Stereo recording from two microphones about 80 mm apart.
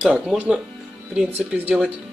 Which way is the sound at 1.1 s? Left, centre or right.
Centre.